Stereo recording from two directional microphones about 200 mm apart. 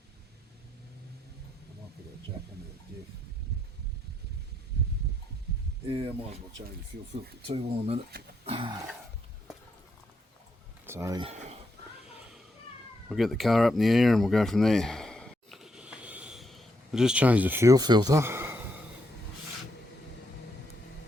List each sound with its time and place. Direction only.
7.4 s speech: 30° right (ahead or behind)
10.8 s speech: 15° right (ahead or behind)
11.2 s speech: 30° right (ahead or behind)
13.1 s a sound: centre (ahead or behind)